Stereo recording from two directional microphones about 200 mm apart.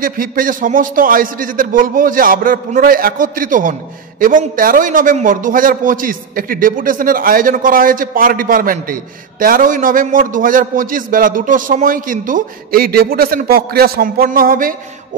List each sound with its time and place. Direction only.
0.0 s a man's voice: 45° right (ahead or behind)